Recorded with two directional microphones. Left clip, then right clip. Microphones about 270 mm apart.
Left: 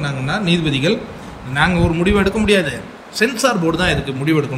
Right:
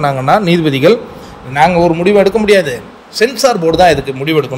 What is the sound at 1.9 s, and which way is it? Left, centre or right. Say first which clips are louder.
A man's voice: right 8 dB; centre.